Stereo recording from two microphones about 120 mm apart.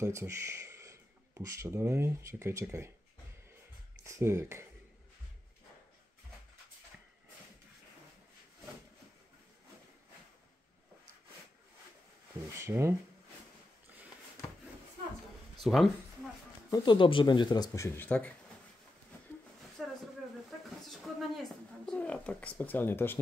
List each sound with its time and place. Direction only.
0.0 s speech: 25° right (ahead or behind)
4.0 s speech: 25° right (ahead or behind)
12.5 s speech: 20° right (ahead or behind)
15.6 s speech: centre (ahead or behind)
16.7 s speech: 40° left (ahead or behind)
17.8 s speech: 15° left (ahead or behind)
19.8 s a sound: centre (ahead or behind); by 23.1 s 20° left (ahead or behind)